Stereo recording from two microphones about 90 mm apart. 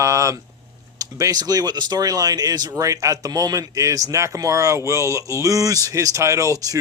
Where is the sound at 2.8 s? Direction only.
35° right (ahead or behind).